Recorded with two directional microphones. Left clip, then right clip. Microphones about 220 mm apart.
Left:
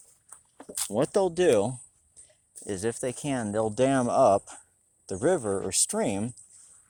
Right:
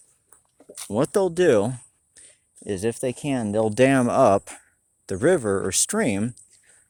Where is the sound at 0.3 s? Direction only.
45° left (ahead or behind).